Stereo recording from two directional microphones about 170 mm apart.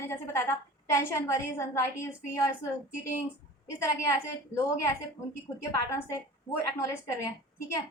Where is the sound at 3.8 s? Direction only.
15° left (ahead or behind).